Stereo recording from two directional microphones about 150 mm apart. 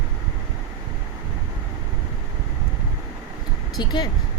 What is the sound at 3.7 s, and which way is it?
Speech, 30° left (ahead or behind).